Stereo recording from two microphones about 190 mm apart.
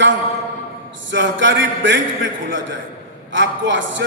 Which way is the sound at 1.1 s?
75° right (ahead or behind).